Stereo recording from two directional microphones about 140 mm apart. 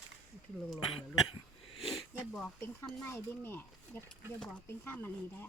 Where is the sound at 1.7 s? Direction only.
Centre (ahead or behind).